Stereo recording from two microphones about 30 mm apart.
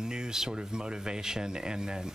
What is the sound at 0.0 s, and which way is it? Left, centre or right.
A woman's voice, right.